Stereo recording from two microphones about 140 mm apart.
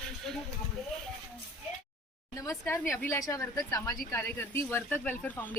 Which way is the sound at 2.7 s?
15° left (ahead or behind).